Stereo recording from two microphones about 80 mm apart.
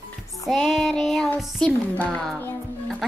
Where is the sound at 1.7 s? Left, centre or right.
Centre.